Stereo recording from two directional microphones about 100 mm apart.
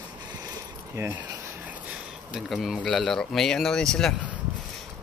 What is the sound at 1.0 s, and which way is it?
Speech, 25° right (ahead or behind).